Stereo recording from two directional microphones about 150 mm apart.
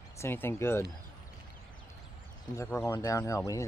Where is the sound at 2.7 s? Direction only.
15° left (ahead or behind).